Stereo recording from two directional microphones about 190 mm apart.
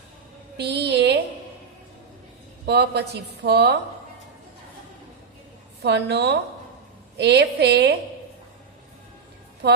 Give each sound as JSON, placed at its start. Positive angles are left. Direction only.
{"t": 0.5, "sound": "a sound", "side_deg": -60}
{"t": 2.6, "sound": "a woman's voice", "side_deg": -60}
{"t": 5.8, "sound": "a woman's voice", "side_deg": -60}
{"t": 9.6, "sound": "a woman's voice", "side_deg": -60}